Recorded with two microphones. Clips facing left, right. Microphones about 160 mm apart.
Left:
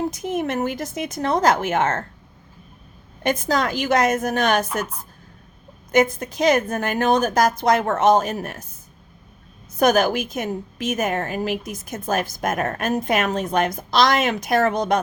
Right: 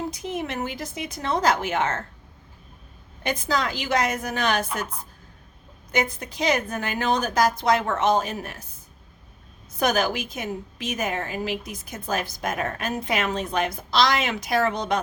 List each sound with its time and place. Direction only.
0.1 s a woman's voice: 45° left (ahead or behind)
3.2 s a woman's voice: 45° left (ahead or behind)
5.9 s a woman's voice: 45° left (ahead or behind)
9.7 s a woman's voice: 45° left (ahead or behind)